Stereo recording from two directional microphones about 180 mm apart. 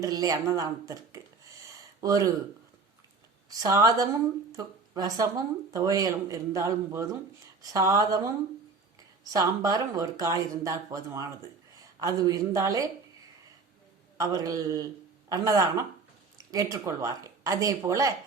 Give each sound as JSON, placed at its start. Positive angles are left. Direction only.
{"t": 0.0, "sound": "speech", "side_deg": -20}
{"t": 3.5, "sound": "speech", "side_deg": -20}
{"t": 14.2, "sound": "speech", "side_deg": -20}